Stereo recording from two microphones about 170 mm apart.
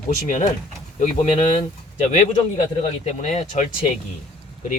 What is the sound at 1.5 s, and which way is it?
Speech, 40° left (ahead or behind).